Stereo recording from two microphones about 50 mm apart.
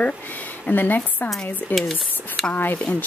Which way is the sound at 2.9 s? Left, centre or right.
Left.